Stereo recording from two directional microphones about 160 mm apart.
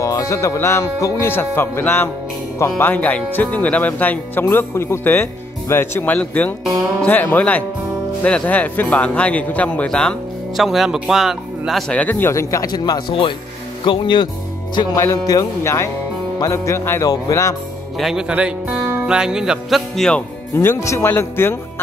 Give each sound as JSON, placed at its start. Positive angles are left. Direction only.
{"t": 0.0, "sound": "speech", "side_deg": 20}
{"t": 17.9, "sound": "speech", "side_deg": 0}
{"t": 20.5, "sound": "speech", "side_deg": 15}